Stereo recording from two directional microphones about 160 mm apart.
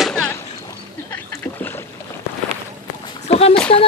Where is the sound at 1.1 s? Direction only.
15° left (ahead or behind).